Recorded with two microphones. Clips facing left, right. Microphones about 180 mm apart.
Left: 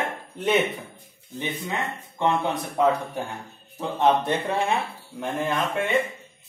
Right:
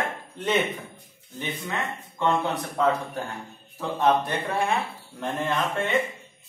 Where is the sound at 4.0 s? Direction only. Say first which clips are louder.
Left 2 dB; 20° left (ahead or behind).